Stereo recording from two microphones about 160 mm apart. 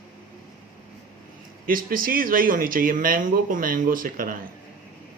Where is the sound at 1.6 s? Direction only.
65° right (ahead or behind).